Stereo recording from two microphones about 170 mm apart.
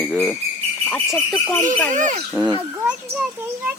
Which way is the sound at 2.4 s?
15° right (ahead or behind).